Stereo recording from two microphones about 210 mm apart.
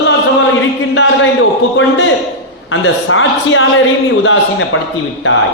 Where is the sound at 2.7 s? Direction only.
65° left (ahead or behind).